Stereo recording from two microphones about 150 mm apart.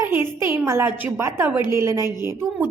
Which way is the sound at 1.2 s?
15° right (ahead or behind).